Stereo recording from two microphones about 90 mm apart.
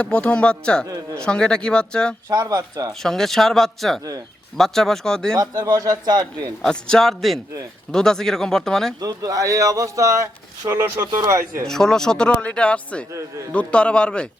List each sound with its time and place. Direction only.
0.0 s speech: 10° left (ahead or behind)
2.3 s speech: 40° right (ahead or behind)
3.0 s speech: 5° left (ahead or behind)
5.4 s speech: 45° right (ahead or behind)
6.6 s speech: 5° left (ahead or behind)
9.0 s speech: 40° right (ahead or behind)
11.6 s speech: 5° left (ahead or behind)